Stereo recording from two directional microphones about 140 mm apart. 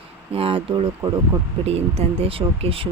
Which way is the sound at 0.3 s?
40° right (ahead or behind).